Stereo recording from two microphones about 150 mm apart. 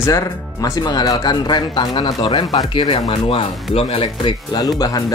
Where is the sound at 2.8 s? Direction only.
40° left (ahead or behind).